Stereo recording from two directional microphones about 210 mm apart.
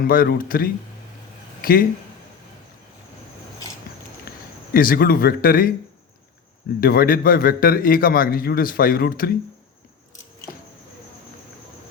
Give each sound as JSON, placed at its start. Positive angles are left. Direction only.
{"t": 0.0, "sound": "a man's voice", "side_deg": 45}
{"t": 4.3, "sound": "speech", "side_deg": 45}
{"t": 6.7, "sound": "a man's voice", "side_deg": 45}